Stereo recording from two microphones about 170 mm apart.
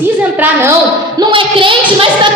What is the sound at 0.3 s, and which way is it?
Speech, 10° right (ahead or behind).